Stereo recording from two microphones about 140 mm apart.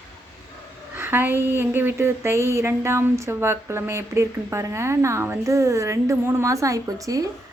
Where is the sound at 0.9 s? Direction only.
15° right (ahead or behind).